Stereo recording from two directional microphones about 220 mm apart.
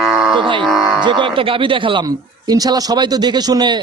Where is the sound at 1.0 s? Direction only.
20° right (ahead or behind).